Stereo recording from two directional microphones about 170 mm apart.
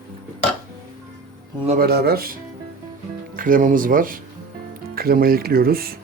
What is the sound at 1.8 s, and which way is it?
Speech, 65° right (ahead or behind).